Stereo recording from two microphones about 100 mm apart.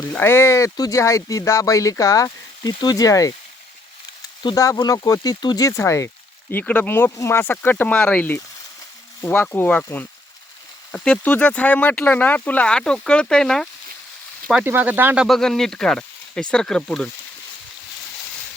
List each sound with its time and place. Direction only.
0.1 s speech: 20° left (ahead or behind)
4.5 s speech: 35° left (ahead or behind)
6.5 s speech: 15° left (ahead or behind)
14.6 s speech: 20° right (ahead or behind)
15.2 s speech: 5° left (ahead or behind)